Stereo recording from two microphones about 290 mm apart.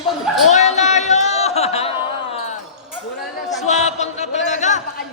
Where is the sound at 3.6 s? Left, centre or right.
Left.